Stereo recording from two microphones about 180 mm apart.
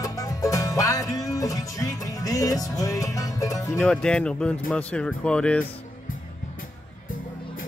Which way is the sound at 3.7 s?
5° left (ahead or behind).